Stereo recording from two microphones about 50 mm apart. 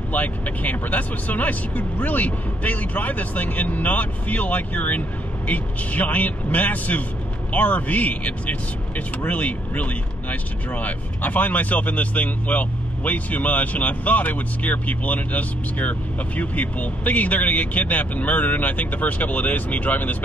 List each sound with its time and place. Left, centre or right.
0.1 s speech: left